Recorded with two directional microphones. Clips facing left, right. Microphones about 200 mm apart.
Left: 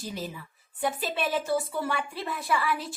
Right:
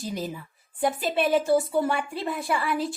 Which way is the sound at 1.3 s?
25° right (ahead or behind).